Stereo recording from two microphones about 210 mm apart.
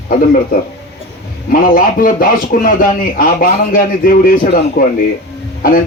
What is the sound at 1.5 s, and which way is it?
A man's voice, 40° left (ahead or behind).